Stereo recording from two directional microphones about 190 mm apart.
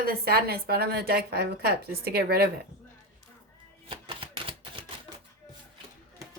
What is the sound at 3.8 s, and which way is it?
Typewriter, 30° right (ahead or behind).